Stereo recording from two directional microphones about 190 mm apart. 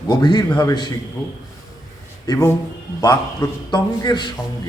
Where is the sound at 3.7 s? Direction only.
20° left (ahead or behind).